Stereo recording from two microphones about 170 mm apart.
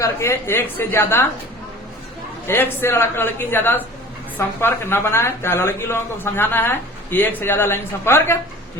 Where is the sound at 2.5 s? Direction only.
15° left (ahead or behind).